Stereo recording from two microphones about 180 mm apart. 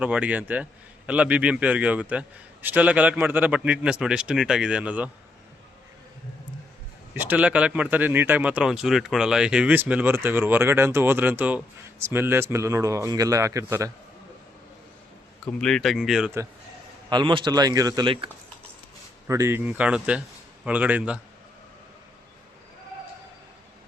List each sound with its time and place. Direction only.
0.0 s speech: 5° right (ahead or behind)
7.2 s speech: 10° right (ahead or behind)
15.4 s speech: 5° left (ahead or behind)
17.1 s a man's voice: 25° right (ahead or behind)
19.3 s speech: 15° right (ahead or behind)